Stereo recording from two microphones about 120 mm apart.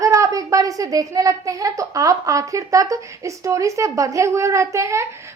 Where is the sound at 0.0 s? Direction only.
25° right (ahead or behind).